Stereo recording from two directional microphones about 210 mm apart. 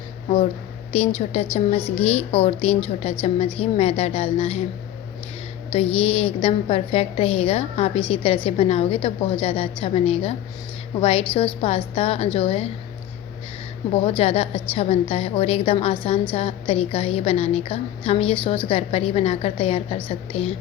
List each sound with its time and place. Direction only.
0.9 s a woman's voice: 30° left (ahead or behind)
5.7 s a woman's voice: 25° left (ahead or behind)
13.9 s a woman's voice: 25° left (ahead or behind)